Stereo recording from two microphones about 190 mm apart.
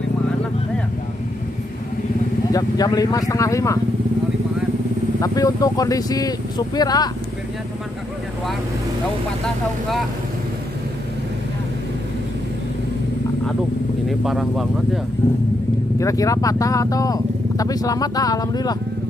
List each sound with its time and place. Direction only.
2.5 s speech: 20° left (ahead or behind)
5.2 s speech: 20° left (ahead or behind)
14.0 s speech: centre (ahead or behind)
16.0 s speech: 15° left (ahead or behind)